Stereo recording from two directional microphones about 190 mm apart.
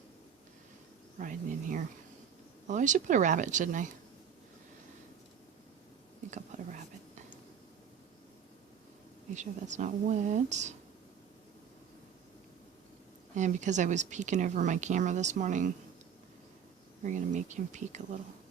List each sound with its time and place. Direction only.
1.2 s a woman's voice: 45° right (ahead or behind)
6.5 s whispering: 40° right (ahead or behind)
9.3 s a woman's voice: 40° right (ahead or behind)
13.3 s a woman's voice: 40° right (ahead or behind)
17.0 s a woman's voice: 40° right (ahead or behind)